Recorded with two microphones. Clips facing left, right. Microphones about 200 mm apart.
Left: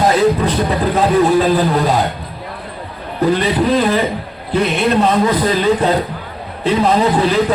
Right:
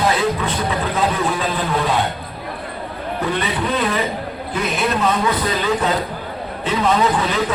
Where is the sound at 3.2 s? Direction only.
35° left (ahead or behind).